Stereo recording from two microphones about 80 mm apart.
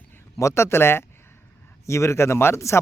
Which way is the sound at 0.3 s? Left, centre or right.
Left.